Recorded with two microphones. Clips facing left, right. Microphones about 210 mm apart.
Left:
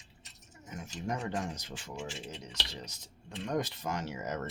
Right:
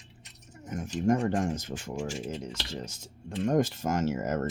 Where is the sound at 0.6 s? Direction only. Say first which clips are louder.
Right 11 dB; 45° right (ahead or behind).